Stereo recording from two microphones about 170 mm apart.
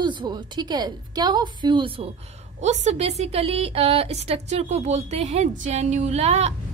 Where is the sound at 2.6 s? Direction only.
45° right (ahead or behind).